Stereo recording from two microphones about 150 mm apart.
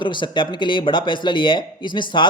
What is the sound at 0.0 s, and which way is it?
Speech, 30° left (ahead or behind).